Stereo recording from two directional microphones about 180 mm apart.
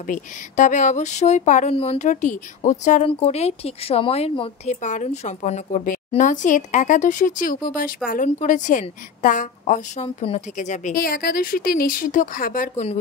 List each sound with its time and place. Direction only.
0.0 s speech: 45° left (ahead or behind)